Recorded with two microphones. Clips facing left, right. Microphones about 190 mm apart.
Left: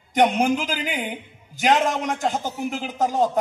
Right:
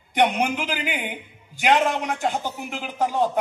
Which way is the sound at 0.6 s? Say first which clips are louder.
Left 1 dB; 40° left (ahead or behind).